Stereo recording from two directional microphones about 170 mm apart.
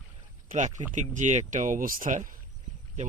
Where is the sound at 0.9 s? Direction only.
45° right (ahead or behind).